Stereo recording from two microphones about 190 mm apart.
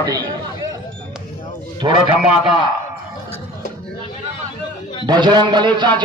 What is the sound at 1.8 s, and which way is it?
Speech, 25° right (ahead or behind).